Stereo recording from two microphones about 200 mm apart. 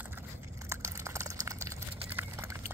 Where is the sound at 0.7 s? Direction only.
15° right (ahead or behind).